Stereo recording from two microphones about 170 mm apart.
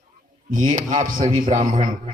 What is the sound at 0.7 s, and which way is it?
Speech, 50° right (ahead or behind).